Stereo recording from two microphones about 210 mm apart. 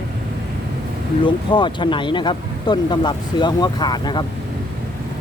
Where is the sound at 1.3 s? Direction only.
20° left (ahead or behind).